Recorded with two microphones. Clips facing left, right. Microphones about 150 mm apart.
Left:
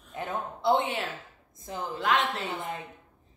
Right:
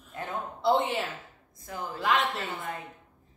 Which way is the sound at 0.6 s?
Centre (ahead or behind).